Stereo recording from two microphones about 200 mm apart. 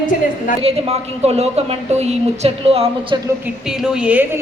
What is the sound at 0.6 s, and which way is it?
A woman's voice, 30° right (ahead or behind).